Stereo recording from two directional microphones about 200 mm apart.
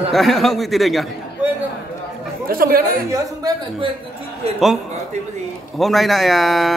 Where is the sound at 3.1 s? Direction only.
15° right (ahead or behind).